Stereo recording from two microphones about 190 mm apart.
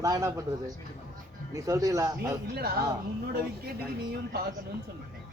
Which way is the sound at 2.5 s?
55° right (ahead or behind).